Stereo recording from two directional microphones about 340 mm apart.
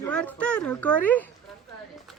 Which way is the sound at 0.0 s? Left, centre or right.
Centre.